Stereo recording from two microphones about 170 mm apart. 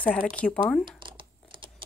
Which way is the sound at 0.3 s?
5° left (ahead or behind).